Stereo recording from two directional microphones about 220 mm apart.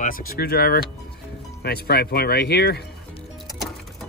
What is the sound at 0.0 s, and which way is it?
Speech, 40° left (ahead or behind).